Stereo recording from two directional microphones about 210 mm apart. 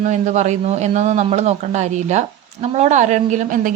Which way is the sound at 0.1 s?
35° right (ahead or behind).